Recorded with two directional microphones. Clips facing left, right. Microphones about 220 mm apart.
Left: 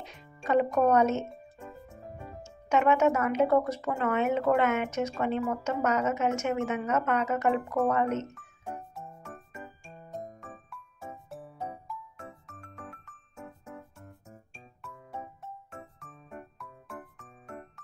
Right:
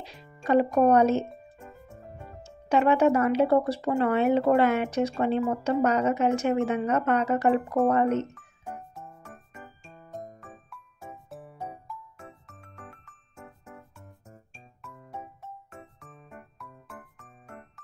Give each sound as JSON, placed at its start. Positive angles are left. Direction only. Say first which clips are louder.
{"t": 0.0, "sound": "speech", "louder": "right 4 dB", "side_deg": -35}
{"t": 1.3, "sound": "music", "louder": "left 1 dB", "side_deg": 0}
{"t": 2.4, "sound": "speech", "louder": "right 2 dB", "side_deg": -35}
{"t": 8.4, "sound": "music", "louder": "even", "side_deg": 0}
{"t": 10.1, "sound": "music", "louder": "even", "side_deg": 0}
{"t": 14.8, "sound": "music", "louder": "even", "side_deg": 0}